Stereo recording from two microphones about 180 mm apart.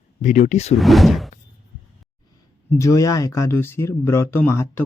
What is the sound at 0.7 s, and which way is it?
Speech, centre (ahead or behind).